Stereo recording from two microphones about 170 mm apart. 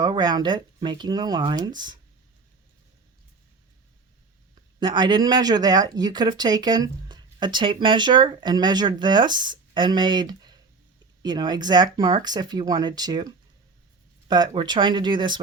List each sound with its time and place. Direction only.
0.0 s speech: 25° right (ahead or behind)
4.8 s speech: 25° right (ahead or behind)